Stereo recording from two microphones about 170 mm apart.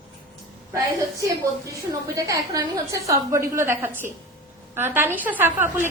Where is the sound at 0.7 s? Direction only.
20° right (ahead or behind).